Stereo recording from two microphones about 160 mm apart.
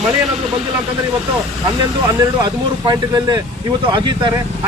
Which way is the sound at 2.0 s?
25° right (ahead or behind).